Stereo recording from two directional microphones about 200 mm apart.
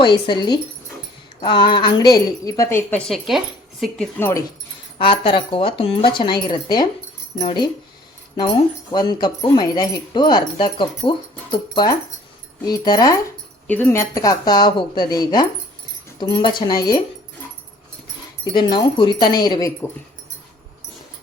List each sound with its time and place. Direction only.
0.0 s speech: 20° left (ahead or behind)
3.1 s speech: centre (ahead or behind)
4.9 s speech: 25° left (ahead or behind)
8.9 s speech: 20° left (ahead or behind)
18.5 s speech: 20° left (ahead or behind)